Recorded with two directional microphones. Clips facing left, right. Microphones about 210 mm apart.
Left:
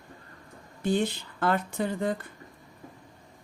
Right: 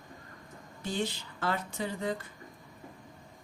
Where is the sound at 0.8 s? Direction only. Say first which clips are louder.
Left 7 dB; 55° left (ahead or behind).